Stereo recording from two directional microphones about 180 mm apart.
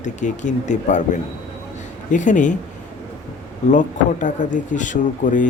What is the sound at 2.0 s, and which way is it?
Speech, 45° left (ahead or behind).